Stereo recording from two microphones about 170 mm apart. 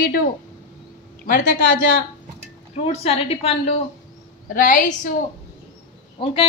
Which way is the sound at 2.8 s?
35° left (ahead or behind).